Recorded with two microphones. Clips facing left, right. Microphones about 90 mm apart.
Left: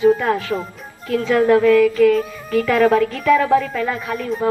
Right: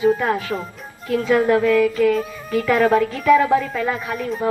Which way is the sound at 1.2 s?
15° right (ahead or behind).